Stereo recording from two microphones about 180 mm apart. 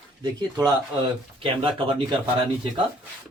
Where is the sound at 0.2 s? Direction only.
25° right (ahead or behind).